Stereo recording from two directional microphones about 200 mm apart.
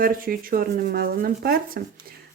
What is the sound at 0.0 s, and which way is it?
Speech, 45° right (ahead or behind).